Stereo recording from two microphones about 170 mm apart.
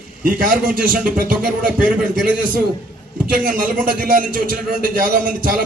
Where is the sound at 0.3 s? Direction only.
55° right (ahead or behind).